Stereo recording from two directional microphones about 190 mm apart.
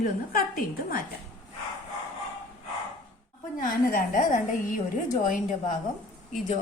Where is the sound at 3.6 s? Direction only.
45° left (ahead or behind).